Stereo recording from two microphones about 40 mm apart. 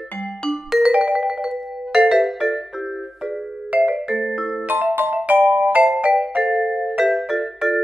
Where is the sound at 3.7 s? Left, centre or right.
Right.